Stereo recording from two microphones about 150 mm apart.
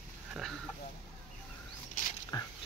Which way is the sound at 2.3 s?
25° left (ahead or behind).